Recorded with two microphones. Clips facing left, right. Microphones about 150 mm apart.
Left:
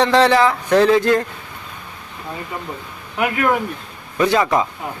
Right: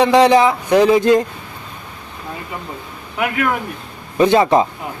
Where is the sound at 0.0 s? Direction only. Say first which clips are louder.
Right 3 dB; 15° right (ahead or behind).